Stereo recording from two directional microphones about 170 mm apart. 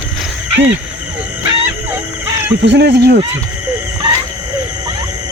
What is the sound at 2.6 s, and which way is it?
Speech, 90° right.